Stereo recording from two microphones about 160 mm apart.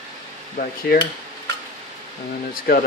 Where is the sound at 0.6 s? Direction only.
80° left.